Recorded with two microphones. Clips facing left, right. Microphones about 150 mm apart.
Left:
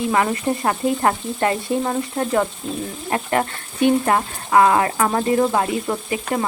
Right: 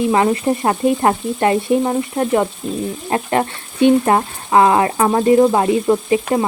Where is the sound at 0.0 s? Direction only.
20° right (ahead or behind).